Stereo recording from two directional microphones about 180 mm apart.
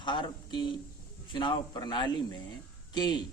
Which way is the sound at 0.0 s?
25° left (ahead or behind).